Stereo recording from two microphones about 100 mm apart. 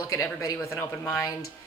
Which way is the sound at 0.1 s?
35° left (ahead or behind).